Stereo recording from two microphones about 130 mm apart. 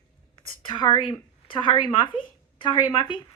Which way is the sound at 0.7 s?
40° left (ahead or behind).